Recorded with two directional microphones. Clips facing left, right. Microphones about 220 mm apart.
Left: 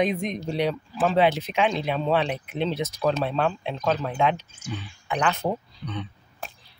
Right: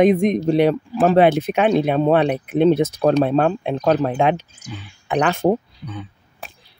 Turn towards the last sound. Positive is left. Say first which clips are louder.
# right 1 dB
turn(degrees=-10)  # may be behind; listen again after turning